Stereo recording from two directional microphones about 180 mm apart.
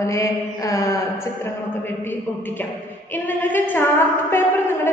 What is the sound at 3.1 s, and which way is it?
A woman's voice, 10° left (ahead or behind).